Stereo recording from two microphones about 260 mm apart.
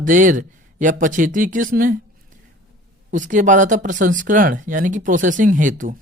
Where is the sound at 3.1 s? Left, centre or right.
Right.